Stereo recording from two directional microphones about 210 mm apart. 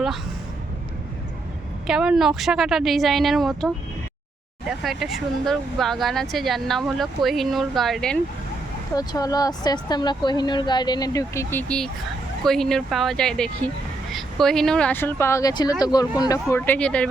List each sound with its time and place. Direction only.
1.9 s speech: 5° right (ahead or behind)
4.8 s speech: centre (ahead or behind)
9.0 s a woman's voice: 15° left (ahead or behind)